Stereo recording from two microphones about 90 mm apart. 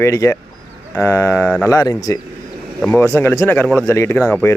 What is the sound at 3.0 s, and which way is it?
Speech, 25° left (ahead or behind).